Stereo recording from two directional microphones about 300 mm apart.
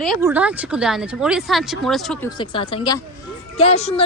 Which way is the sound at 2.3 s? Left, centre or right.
Centre.